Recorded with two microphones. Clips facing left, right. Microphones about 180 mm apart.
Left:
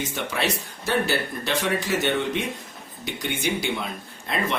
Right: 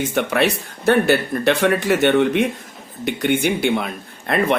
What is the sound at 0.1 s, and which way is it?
Speech, 60° right (ahead or behind).